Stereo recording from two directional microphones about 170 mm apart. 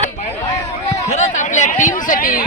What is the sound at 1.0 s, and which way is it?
Speech, 45° left (ahead or behind).